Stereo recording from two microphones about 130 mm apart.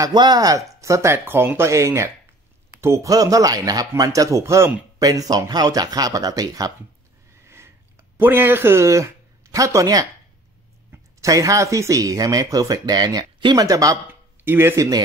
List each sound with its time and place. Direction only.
0.0 s speech: 35° right (ahead or behind)
7.4 s sniff: 20° right (ahead or behind)
8.2 s speech: 15° right (ahead or behind)
14.4 s speech: 15° right (ahead or behind)